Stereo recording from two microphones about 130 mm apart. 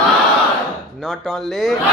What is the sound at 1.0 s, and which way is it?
Speech, centre (ahead or behind).